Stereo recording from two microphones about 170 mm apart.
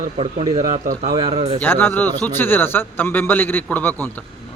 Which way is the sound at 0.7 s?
50° right (ahead or behind).